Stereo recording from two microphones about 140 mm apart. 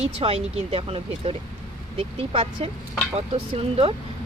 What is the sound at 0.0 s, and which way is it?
Speech, 45° right (ahead or behind).